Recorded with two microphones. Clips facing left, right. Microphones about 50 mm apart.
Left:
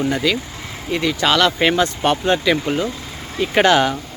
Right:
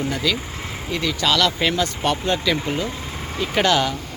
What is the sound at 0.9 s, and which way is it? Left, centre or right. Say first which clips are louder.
Speech: left 4 dB; left.